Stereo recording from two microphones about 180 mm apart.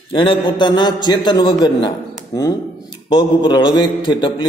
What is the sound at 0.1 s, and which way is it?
A man's voice, 30° left (ahead or behind).